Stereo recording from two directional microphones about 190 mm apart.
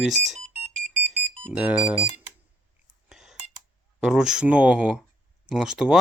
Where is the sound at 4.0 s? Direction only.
5° right (ahead or behind).